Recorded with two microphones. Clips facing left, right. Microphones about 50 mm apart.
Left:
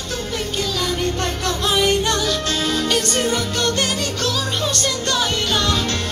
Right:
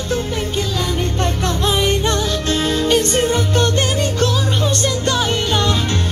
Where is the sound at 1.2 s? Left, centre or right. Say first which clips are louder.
Right 3 dB; right.